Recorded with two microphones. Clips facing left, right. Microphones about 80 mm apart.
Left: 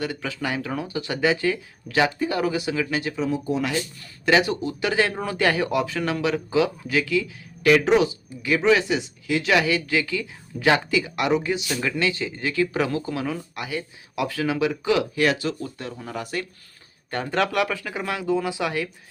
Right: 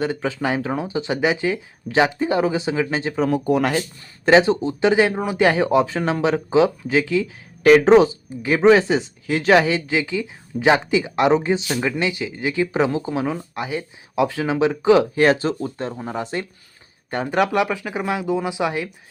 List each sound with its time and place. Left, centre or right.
0.0 s speech: right
3.2 s speech: right
4.3 s speech: right